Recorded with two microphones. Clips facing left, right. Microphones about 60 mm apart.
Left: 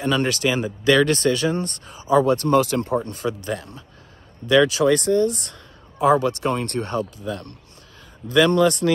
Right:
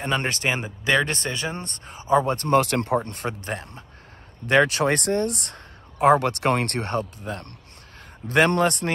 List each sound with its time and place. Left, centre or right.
0.0 s speech: right
1.9 s speech: right